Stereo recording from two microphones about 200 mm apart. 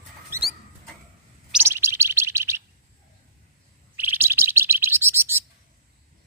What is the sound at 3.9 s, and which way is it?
Bird, 10° right (ahead or behind).